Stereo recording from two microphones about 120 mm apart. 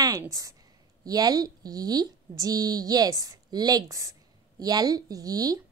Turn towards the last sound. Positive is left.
turn(degrees=-30)  # may be behind; listen again after turning